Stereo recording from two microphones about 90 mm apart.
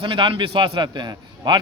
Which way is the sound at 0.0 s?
70° right (ahead or behind).